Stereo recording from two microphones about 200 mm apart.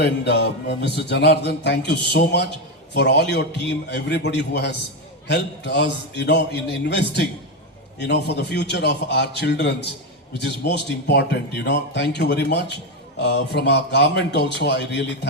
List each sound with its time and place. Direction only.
0.0 s a man's voice: 60° left (ahead or behind)